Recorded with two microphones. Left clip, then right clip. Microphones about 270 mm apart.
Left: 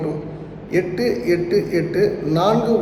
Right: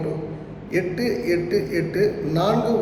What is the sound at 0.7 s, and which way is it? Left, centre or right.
A man's voice, centre.